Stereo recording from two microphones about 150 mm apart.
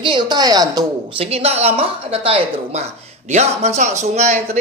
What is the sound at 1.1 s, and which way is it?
A woman's voice, 40° right (ahead or behind).